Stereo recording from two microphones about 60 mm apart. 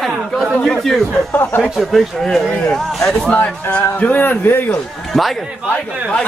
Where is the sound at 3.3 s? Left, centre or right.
Left.